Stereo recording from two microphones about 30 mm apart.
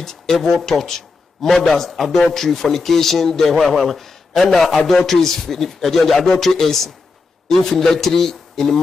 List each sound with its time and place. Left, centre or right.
0.0 s a man's voice: centre